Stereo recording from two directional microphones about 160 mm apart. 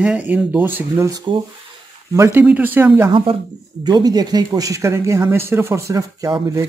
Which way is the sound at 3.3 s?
35° right (ahead or behind).